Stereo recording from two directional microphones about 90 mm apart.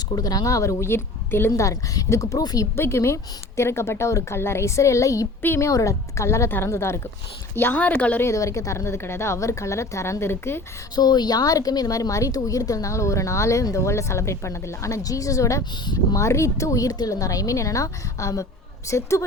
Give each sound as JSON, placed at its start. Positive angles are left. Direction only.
{"t": 0.2, "sound": "speech", "side_deg": 45}
{"t": 2.4, "sound": "speech", "side_deg": 50}
{"t": 2.7, "sound": "speech", "side_deg": 30}
{"t": 8.3, "sound": "speech", "side_deg": 35}
{"t": 10.9, "sound": "speech", "side_deg": 50}